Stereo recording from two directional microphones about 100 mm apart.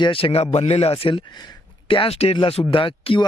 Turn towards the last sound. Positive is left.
turn(degrees=60)  # may be behind; listen again after turning